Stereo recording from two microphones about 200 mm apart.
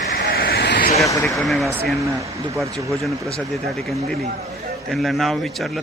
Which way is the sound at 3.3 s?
Centre (ahead or behind).